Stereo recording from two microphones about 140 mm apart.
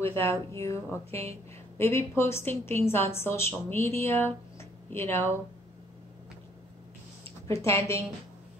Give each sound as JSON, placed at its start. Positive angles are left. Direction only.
{"t": 0.0, "sound": "a woman's voice", "side_deg": 20}
{"t": 7.4, "sound": "speech", "side_deg": 20}